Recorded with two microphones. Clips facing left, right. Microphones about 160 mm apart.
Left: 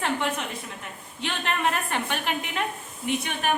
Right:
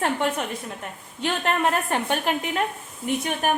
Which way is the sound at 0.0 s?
45° right (ahead or behind).